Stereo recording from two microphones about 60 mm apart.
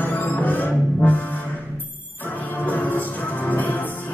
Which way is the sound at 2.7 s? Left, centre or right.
Left.